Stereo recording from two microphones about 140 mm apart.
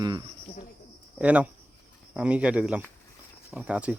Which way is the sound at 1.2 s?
10° right (ahead or behind).